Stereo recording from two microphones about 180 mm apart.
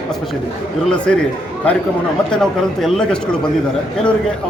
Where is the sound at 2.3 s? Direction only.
Centre (ahead or behind).